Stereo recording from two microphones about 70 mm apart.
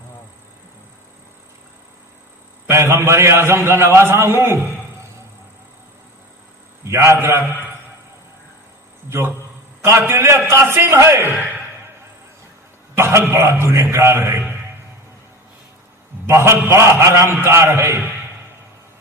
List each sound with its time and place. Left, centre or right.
2.6 s a man's voice: right
6.8 s a man's voice: right
9.0 s a man's voice: right
13.0 s a man's voice: right
16.2 s a man's voice: right